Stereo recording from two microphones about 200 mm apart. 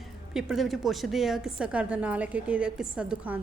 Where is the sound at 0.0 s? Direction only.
Centre (ahead or behind).